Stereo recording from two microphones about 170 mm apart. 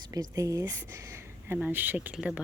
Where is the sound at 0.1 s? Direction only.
20° right (ahead or behind).